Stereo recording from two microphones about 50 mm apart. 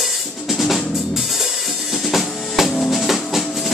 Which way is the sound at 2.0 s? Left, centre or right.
Centre.